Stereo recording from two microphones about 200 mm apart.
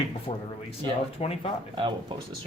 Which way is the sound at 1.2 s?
30° left (ahead or behind).